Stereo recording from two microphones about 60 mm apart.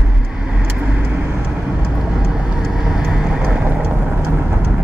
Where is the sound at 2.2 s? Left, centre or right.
Centre; by 3.8 s right.